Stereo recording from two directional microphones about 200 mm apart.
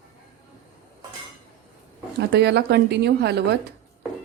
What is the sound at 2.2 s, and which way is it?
A woman's voice, 55° right (ahead or behind).